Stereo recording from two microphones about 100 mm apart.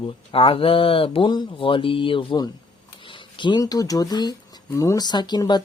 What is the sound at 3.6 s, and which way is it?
Speech, 35° left (ahead or behind).